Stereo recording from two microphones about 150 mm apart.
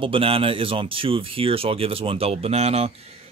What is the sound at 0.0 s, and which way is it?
Speech, 35° right (ahead or behind).